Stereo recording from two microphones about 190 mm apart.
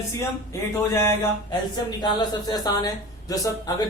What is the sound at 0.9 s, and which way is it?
Speech, 20° left (ahead or behind).